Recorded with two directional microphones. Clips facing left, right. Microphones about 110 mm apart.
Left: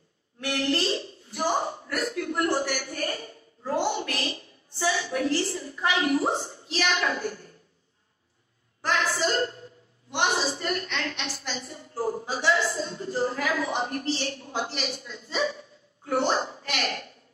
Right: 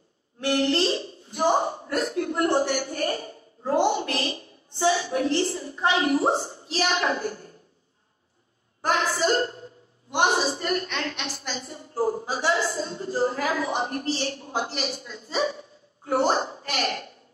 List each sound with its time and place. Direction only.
0.4 s a woman's voice: 25° right (ahead or behind)
8.9 s a sound: 30° right (ahead or behind)
10.1 s a woman's voice: 40° right (ahead or behind)